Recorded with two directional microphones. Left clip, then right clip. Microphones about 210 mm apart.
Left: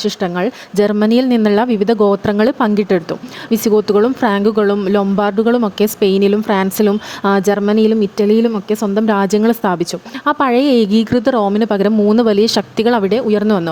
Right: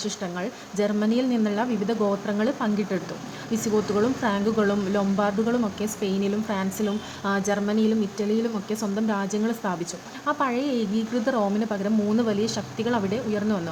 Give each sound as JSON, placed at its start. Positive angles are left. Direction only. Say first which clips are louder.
{"t": 0.0, "sound": "speech", "louder": "left 13 dB", "side_deg": 50}